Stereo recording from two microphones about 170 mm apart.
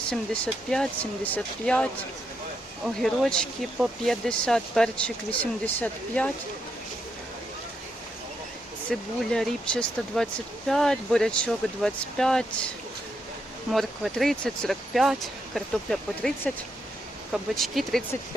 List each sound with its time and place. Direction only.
0.1 s speech: 5° left (ahead or behind)
8.9 s speech: 5° left (ahead or behind)
13.7 s speech: centre (ahead or behind)
17.3 s speech: centre (ahead or behind)